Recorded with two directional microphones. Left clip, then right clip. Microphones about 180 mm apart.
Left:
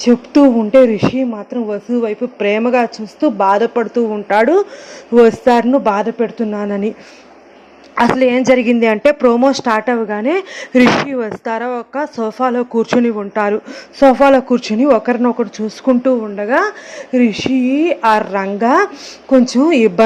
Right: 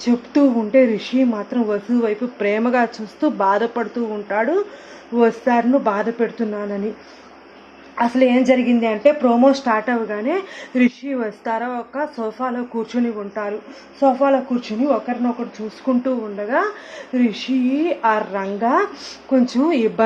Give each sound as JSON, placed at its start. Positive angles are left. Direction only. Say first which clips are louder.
{"t": 0.0, "sound": "speech", "louder": "left 7 dB", "side_deg": 25}
{"t": 4.3, "sound": "a woman's voice", "louder": "left 7 dB", "side_deg": 35}
{"t": 7.9, "sound": "a woman's voice", "louder": "left 4 dB", "side_deg": 45}
{"t": 16.0, "sound": "a woman's voice", "louder": "left 8 dB", "side_deg": 30}